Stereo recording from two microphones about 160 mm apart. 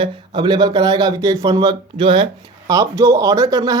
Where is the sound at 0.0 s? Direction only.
30° right (ahead or behind).